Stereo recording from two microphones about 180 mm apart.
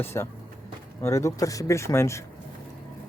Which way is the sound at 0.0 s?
15° left (ahead or behind).